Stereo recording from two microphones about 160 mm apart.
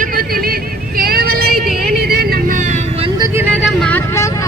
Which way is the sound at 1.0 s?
70° right (ahead or behind).